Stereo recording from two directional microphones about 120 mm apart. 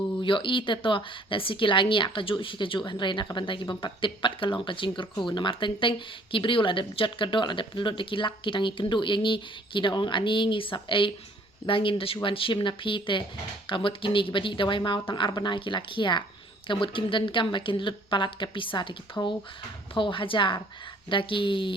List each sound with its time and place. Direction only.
0.2 s speech: 45° left (ahead or behind)